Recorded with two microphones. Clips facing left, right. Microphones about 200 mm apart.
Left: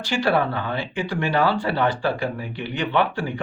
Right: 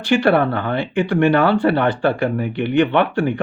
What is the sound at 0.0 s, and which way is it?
Speech, 60° right (ahead or behind).